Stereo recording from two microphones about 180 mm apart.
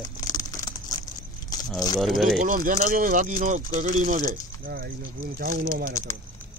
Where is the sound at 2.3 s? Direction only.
50° right (ahead or behind).